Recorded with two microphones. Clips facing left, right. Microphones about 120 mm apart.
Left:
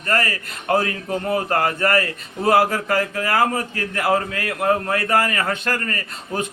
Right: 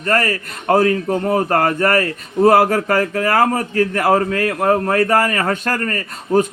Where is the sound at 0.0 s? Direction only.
45° right (ahead or behind).